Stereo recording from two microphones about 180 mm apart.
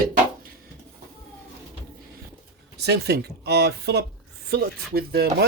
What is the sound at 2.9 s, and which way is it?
Speech, 65° right (ahead or behind).